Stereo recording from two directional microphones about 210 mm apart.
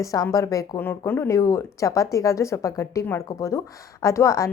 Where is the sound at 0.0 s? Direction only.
15° left (ahead or behind).